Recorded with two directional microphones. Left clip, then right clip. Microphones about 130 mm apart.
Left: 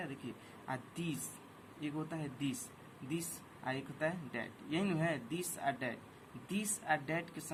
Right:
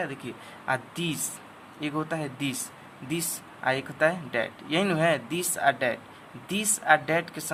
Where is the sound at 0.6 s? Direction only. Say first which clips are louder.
Right 14 dB; 45° right (ahead or behind).